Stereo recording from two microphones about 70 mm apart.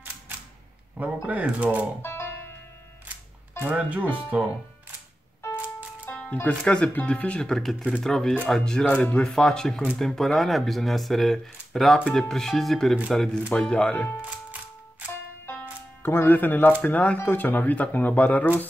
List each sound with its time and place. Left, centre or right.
0.9 s speech: right
2.0 s music: left
3.7 s speech: right
6.0 s music: centre
6.6 s speech: centre
6.9 s speech: left; by 8.8 s centre
8.8 s speech: centre
15.4 s music: left
16.8 s speech: left